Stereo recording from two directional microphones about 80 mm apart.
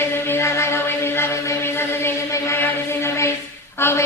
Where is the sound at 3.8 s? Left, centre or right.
Left.